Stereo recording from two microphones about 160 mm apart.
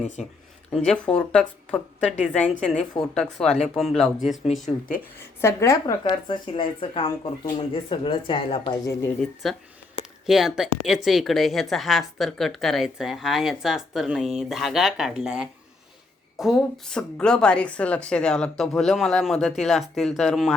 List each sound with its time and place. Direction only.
0.7 s speech: 5° left (ahead or behind)
5.4 s speech: 15° left (ahead or behind); by 8.8 s 35° left (ahead or behind)
8.8 s speech: 20° left (ahead or behind)
10.2 s speech: 5° right (ahead or behind)